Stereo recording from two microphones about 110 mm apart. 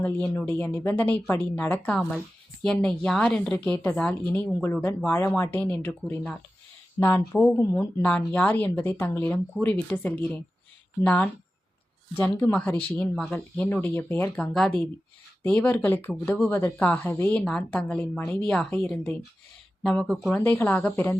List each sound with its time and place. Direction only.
0.0 s speech: 20° left (ahead or behind)
7.5 s speech: 25° left (ahead or behind)
14.5 s speech: 5° left (ahead or behind)
20.4 s speech: 20° left (ahead or behind)